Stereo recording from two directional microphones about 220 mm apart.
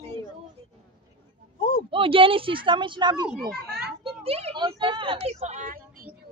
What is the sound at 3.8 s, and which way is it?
Children playing, 5° right (ahead or behind).